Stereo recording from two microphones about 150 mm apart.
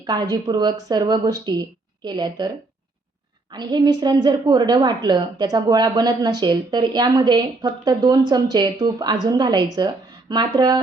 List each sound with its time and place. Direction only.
0.0 s a woman's voice: 25° right (ahead or behind)
3.5 s a woman's voice: 30° right (ahead or behind)